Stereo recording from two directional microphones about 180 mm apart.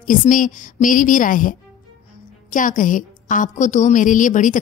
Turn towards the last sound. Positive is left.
turn(degrees=45)  # may be behind; listen again after turning